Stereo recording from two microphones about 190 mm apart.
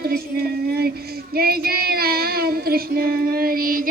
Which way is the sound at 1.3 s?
55° right (ahead or behind).